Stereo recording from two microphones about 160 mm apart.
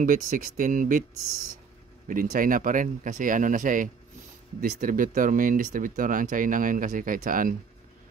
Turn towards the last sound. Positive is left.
turn(degrees=-60)  # may be behind; listen again after turning